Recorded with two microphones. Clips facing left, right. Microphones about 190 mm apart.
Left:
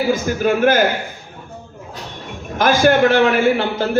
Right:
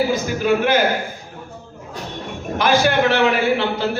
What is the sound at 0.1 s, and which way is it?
Speech, 50° left (ahead or behind).